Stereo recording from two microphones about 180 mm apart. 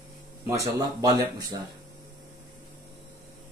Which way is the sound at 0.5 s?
20° right (ahead or behind).